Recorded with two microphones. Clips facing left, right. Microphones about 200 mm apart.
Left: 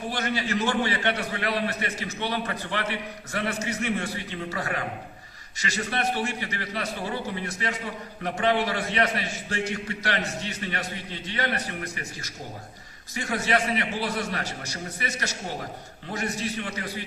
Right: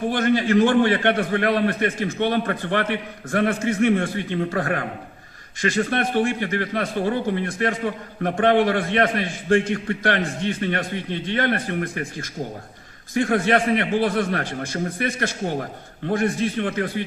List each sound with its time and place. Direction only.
0.1 s a man's voice: 50° right (ahead or behind)